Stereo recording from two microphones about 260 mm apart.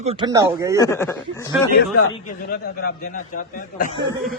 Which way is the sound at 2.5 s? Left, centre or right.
Left.